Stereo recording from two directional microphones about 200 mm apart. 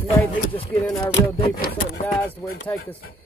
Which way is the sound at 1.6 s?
50° left (ahead or behind).